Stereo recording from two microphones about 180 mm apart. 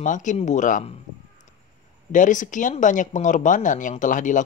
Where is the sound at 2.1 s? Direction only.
45° left (ahead or behind).